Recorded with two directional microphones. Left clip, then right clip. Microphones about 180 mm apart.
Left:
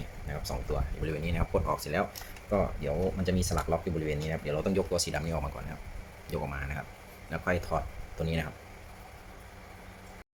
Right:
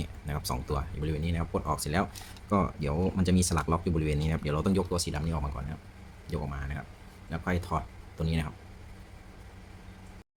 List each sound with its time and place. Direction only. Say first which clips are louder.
0.0 s a sound: right 2 dB; 35° right (ahead or behind)
1.0 s speech: left 1 dB; 15° right (ahead or behind)
1.7 s speech: even; 25° right (ahead or behind)